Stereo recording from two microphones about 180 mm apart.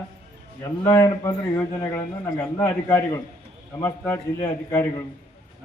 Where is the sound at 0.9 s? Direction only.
20° left (ahead or behind).